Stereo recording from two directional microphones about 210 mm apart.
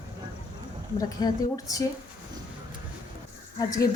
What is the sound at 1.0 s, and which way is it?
Speech, 15° left (ahead or behind).